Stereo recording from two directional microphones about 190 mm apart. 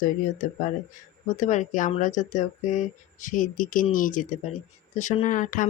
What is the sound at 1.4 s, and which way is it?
Speech, 40° left (ahead or behind).